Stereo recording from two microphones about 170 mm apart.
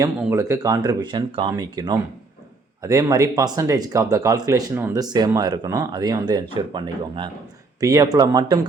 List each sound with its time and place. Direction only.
0.2 s speech: 15° right (ahead or behind)